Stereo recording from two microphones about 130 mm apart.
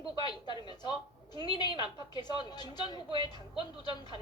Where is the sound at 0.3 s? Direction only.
35° left (ahead or behind).